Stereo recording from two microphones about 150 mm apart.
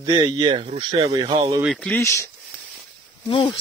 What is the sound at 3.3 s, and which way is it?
Speech, 30° left (ahead or behind).